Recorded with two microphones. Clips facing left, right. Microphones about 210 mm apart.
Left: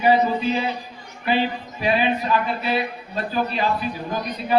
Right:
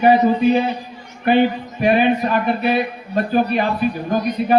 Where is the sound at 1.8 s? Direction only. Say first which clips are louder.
Right 6 dB; 55° right (ahead or behind).